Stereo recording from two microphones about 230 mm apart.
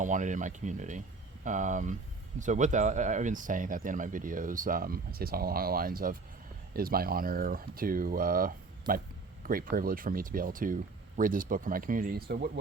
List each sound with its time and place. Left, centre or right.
0.0 s speech: right